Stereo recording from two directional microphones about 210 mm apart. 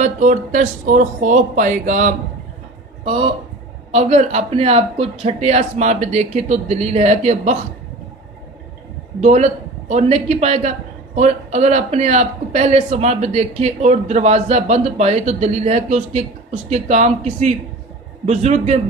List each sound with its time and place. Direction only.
0.0 s a man's voice: 35° right (ahead or behind)
3.9 s a man's voice: 30° right (ahead or behind)
9.2 s a man's voice: 30° right (ahead or behind)